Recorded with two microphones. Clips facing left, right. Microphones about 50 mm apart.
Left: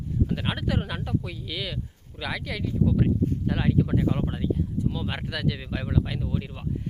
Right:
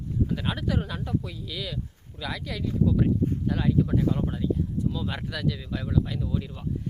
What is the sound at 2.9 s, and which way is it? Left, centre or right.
Speech, left.